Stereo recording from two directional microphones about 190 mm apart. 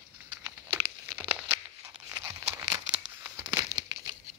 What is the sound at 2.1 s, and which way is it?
Crumpling, 20° right (ahead or behind).